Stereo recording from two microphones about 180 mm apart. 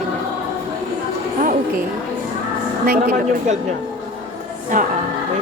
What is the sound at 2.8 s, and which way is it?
Speech, 55° right (ahead or behind).